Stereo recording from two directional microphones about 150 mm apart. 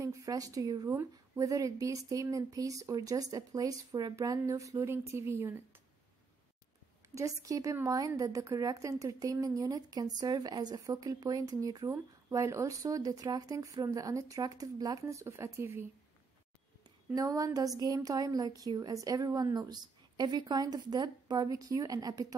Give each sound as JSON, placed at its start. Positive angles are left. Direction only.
{"t": 0.0, "sound": "a woman's voice", "side_deg": -20}
{"t": 7.2, "sound": "a woman's voice", "side_deg": -20}
{"t": 17.1, "sound": "a woman's voice", "side_deg": -25}